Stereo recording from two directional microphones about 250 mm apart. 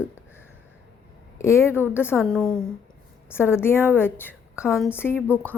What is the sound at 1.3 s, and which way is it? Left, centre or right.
A woman's voice, centre.